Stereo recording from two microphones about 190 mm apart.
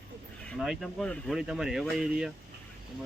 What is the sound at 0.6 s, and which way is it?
Speech, centre (ahead or behind).